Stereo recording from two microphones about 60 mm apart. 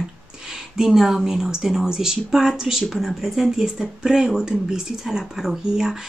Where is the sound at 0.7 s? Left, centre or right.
Centre.